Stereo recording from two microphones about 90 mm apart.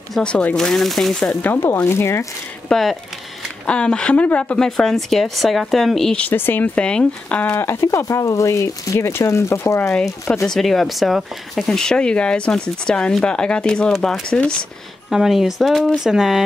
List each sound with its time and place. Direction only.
0.1 s a woman's voice: 10° left (ahead or behind)
1.2 s speech: 20° left (ahead or behind)
2.7 s a woman's voice: centre (ahead or behind)
3.6 s a woman's voice: 10° left (ahead or behind)
6.1 s speech: 20° left (ahead or behind)
7.5 s speech: 30° left (ahead or behind)
9.9 s speech: 5° left (ahead or behind)
13.9 s a woman's voice: centre (ahead or behind)